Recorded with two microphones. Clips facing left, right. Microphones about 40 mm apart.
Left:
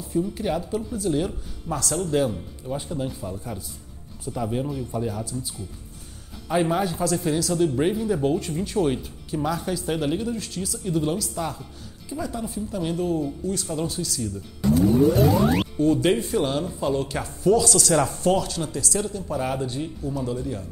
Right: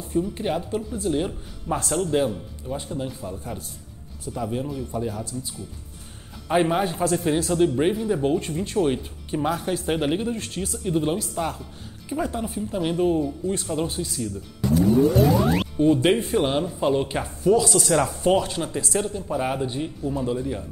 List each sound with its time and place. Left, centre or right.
0.3 s speech: right
2.0 s speech: right
2.7 s speech: centre
6.5 s speech: right
8.1 s speech: centre
8.8 s speech: centre
9.3 s speech: right
14.6 s music: centre
15.8 s speech: right
17.4 s speech: centre
18.2 s speech: right
19.2 s speech: centre